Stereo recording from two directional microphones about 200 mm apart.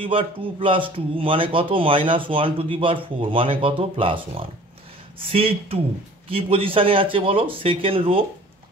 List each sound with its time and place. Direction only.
0.0 s speech: 25° right (ahead or behind)